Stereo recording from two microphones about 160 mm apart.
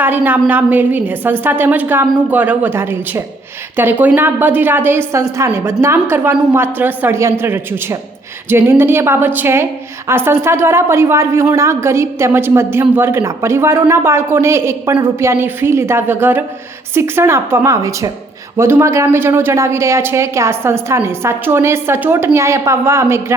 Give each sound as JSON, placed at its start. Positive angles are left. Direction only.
{"t": 0.0, "sound": "a woman's voice", "side_deg": -10}